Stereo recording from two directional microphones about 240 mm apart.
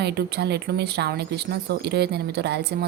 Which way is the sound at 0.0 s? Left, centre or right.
Right.